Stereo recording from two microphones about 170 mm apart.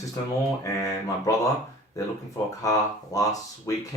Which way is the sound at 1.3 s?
20° left (ahead or behind).